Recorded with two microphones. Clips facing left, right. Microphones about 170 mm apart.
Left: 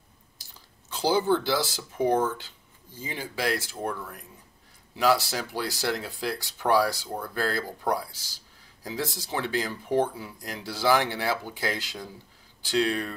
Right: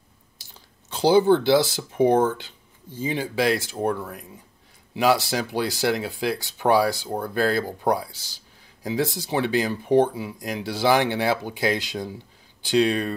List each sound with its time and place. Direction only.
0.9 s speech: 20° right (ahead or behind)